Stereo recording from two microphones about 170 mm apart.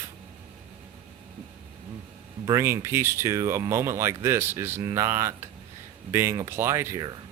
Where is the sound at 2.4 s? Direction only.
15° right (ahead or behind).